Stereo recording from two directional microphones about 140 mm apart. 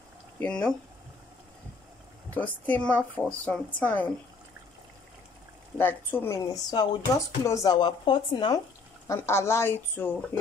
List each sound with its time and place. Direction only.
0.4 s a woman's voice: 10° left (ahead or behind)
2.3 s a woman's voice: 10° left (ahead or behind)
5.8 s a woman's voice: 15° left (ahead or behind)
6.7 s speech: 30° left (ahead or behind)
9.0 s a woman's voice: 20° left (ahead or behind)